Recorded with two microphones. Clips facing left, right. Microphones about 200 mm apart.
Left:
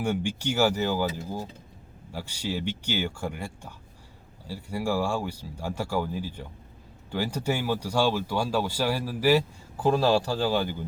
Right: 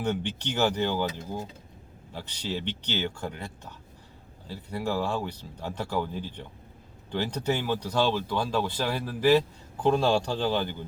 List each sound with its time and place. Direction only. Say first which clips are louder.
0.0 s speech: left 2 dB; 10° left (ahead or behind)